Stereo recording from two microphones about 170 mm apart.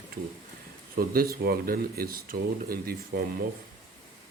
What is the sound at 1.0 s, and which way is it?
Speech, 60° right (ahead or behind).